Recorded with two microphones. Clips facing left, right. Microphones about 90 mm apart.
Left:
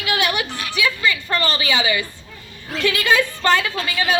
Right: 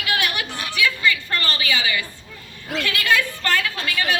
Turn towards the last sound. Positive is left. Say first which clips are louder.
# left 2 dB
turn(degrees=20)  # may be behind; listen again after turning